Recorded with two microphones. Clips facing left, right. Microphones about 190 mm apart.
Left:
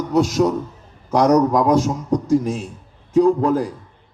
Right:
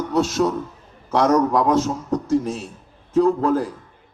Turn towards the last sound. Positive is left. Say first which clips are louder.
# left 2 dB
turn(degrees=10)  # may be behind; listen again after turning